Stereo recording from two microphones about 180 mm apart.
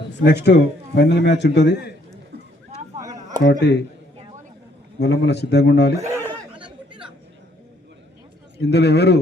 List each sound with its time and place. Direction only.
0.3 s a man's voice: 70° left (ahead or behind)
3.4 s a man's voice: 70° left (ahead or behind)
4.9 s a man's voice: 70° left (ahead or behind)
6.1 s a sound: 15° right (ahead or behind)
8.5 s a man's voice: 65° left (ahead or behind)